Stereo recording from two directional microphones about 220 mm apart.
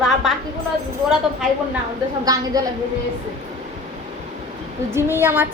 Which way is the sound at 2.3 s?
15° right (ahead or behind).